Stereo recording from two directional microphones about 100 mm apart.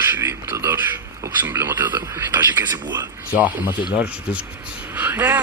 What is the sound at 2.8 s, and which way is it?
Speech, 45° right (ahead or behind).